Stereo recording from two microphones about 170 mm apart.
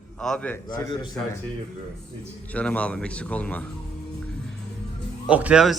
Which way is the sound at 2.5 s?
10° left (ahead or behind).